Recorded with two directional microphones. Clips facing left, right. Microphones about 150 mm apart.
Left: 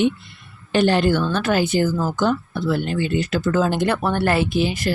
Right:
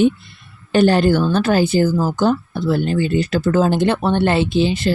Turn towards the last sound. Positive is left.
turn(degrees=-25)  # may be behind; listen again after turning